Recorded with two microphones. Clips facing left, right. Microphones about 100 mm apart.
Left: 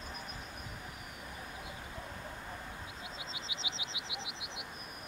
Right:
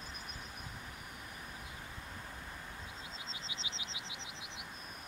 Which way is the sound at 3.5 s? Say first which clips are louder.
Left 3 dB; 70° left (ahead or behind).